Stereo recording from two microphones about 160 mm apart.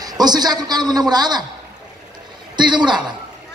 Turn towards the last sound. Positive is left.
turn(degrees=-30)  # may be behind; listen again after turning